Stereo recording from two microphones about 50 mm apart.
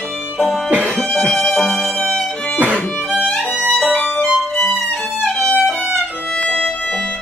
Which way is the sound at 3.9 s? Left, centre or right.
Centre.